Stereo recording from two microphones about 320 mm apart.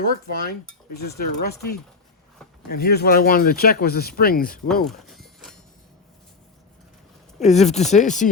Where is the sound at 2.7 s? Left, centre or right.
Left.